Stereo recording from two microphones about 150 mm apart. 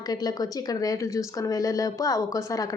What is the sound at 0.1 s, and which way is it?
Speech, 25° left (ahead or behind).